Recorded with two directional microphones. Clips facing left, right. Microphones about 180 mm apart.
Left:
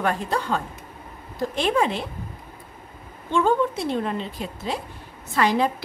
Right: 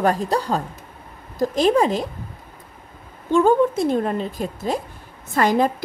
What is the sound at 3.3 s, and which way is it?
A woman's voice, 45° right (ahead or behind).